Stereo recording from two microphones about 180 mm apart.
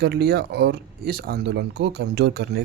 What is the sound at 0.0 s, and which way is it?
Speech, 65° right (ahead or behind).